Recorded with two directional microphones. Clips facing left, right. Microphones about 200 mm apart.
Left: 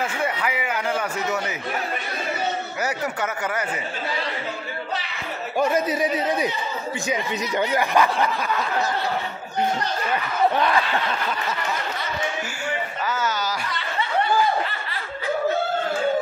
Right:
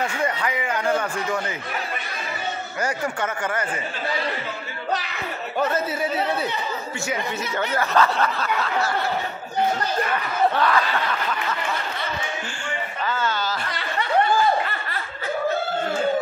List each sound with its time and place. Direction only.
0.0 s speech: 5° left (ahead or behind)
2.8 s speech: 10° left (ahead or behind)
5.6 s speech: 15° left (ahead or behind)
10.5 s a sound: 20° left (ahead or behind)
13.0 s speech: 10° left (ahead or behind)